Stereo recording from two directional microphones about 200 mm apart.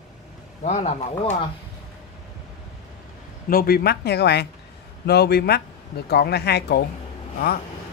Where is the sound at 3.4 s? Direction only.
50° left (ahead or behind).